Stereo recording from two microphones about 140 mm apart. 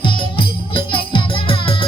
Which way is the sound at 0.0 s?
35° left (ahead or behind).